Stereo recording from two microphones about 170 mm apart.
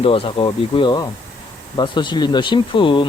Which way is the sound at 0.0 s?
35° left (ahead or behind).